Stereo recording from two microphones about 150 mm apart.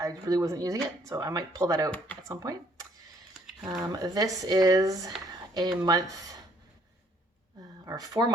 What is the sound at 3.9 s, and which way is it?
Speech, 25° right (ahead or behind).